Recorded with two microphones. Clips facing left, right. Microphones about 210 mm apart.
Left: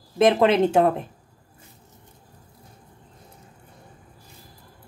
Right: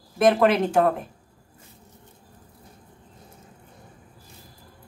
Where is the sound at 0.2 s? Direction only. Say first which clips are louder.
Left 1 dB; 25° left (ahead or behind).